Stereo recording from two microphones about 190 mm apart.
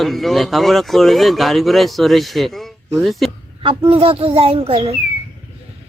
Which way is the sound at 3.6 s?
30° right (ahead or behind).